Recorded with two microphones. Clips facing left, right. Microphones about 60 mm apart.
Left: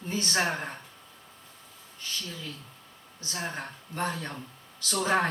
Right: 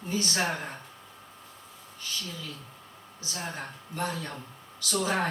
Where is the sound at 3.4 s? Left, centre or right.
Left.